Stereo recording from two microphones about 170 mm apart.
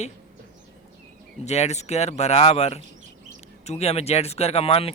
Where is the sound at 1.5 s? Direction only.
40° left (ahead or behind).